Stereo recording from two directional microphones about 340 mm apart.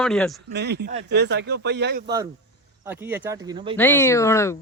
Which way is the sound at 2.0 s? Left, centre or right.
Centre.